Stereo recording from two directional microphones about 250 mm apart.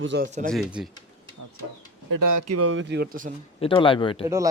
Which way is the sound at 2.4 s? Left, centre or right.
Right.